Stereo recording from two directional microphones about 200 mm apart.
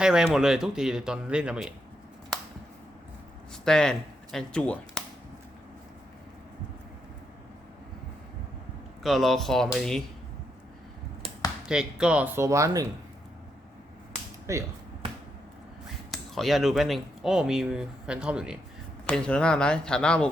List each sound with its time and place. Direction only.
0.0 s speech: 5° right (ahead or behind)
3.5 s speech: 5° left (ahead or behind)
9.0 s speech: centre (ahead or behind)
11.7 s speech: 5° right (ahead or behind)
14.5 s speech: 15° right (ahead or behind)
16.1 s speech: centre (ahead or behind)